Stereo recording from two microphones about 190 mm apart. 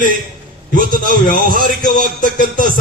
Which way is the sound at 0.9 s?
45° left (ahead or behind).